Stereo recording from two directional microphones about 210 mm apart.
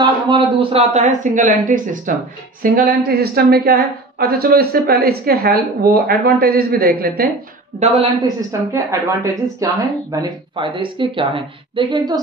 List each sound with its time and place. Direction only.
0.0 s a woman's voice: 25° right (ahead or behind); by 7.2 s 45° right (ahead or behind)
8.2 s speech: 15° right (ahead or behind)